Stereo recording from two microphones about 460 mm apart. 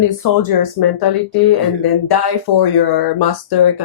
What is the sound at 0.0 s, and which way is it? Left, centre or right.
Speech, left.